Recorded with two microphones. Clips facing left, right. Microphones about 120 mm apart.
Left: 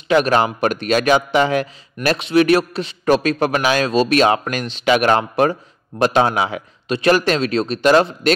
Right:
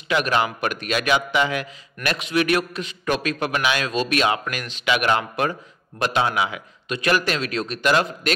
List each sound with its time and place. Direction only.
0.1 s a man's voice: 35° left (ahead or behind)